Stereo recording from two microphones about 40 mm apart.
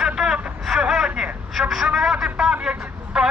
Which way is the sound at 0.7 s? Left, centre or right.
Centre.